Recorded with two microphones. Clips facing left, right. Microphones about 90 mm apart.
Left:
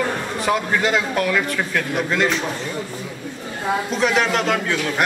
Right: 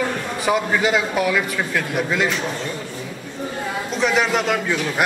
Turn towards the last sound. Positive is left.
turn(degrees=-5)  # may be behind; listen again after turning